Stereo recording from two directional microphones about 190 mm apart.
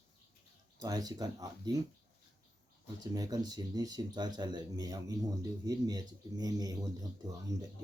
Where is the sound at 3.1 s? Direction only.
20° right (ahead or behind).